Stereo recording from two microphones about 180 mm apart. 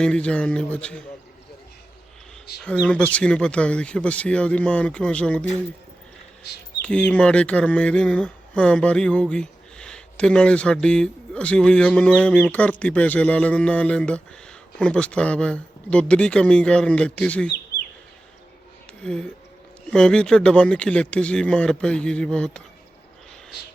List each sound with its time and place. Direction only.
0.0 s speech: 5° left (ahead or behind)
2.6 s speech: 5° left (ahead or behind)
6.8 s speech: 5° left (ahead or behind)
19.0 s speech: 5° left (ahead or behind)